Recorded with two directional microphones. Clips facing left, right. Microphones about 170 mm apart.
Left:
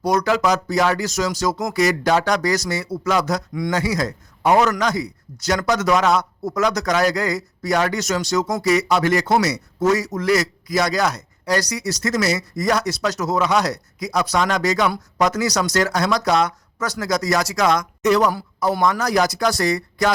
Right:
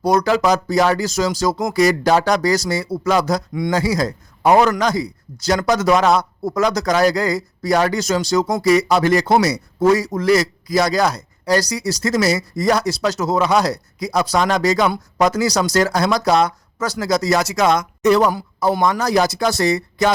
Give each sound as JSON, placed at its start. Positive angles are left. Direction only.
{"t": 0.0, "sound": "speech", "side_deg": -30}